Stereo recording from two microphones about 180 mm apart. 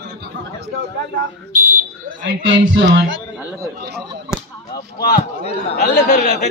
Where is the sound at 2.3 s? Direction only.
90° right.